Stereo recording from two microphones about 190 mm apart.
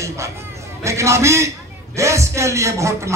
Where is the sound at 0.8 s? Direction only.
15° right (ahead or behind).